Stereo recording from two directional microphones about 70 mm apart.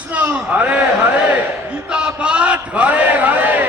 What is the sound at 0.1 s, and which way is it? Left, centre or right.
Speech, centre.